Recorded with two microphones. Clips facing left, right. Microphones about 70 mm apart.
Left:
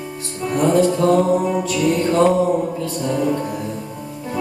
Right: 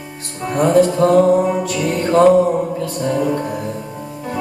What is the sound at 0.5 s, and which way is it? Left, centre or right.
Music, right.